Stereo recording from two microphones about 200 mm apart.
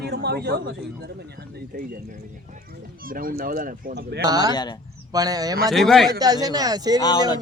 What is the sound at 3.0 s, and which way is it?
Speech, 45° right (ahead or behind).